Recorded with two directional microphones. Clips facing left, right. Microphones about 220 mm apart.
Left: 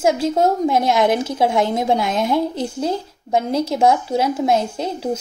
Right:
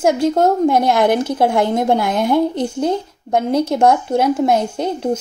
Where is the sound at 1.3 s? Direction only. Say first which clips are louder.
Right 2 dB; 60° right (ahead or behind).